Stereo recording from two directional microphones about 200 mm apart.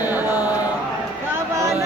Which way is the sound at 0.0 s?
10° right (ahead or behind).